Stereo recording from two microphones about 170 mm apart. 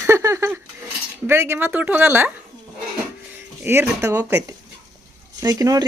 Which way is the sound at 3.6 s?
15° right (ahead or behind).